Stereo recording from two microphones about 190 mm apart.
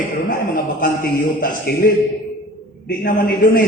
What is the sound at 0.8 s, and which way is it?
A man's voice, 45° left (ahead or behind).